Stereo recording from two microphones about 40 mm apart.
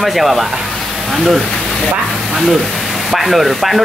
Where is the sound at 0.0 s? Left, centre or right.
Centre.